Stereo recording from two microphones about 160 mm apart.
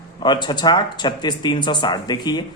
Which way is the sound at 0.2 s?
30° left (ahead or behind).